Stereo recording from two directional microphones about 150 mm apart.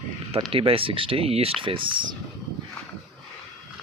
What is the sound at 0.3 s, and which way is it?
Speech, 35° right (ahead or behind).